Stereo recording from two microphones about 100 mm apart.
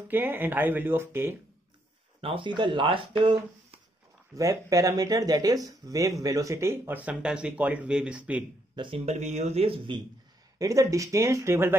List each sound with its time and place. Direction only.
0.1 s speech: 20° right (ahead or behind)
2.2 s speech: 55° right (ahead or behind)
4.4 s speech: 35° right (ahead or behind)
7.1 s speech: 10° right (ahead or behind)
8.7 s speech: 55° right (ahead or behind)
9.0 s speech: 90° right
10.6 s speech: 35° right (ahead or behind)